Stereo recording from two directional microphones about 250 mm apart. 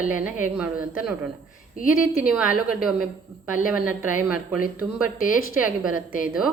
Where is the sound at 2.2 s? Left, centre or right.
Centre.